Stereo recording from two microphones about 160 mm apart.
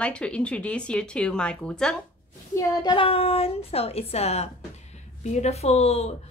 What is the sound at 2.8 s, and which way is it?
A woman's voice, 35° left (ahead or behind).